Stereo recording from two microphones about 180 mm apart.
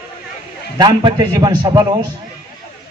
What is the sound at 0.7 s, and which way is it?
A man's voice, 25° right (ahead or behind).